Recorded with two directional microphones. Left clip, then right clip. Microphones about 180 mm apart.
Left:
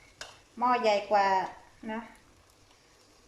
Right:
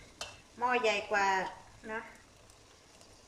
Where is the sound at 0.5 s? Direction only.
30° left (ahead or behind).